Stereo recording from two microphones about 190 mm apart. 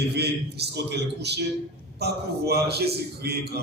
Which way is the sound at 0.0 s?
60° right (ahead or behind).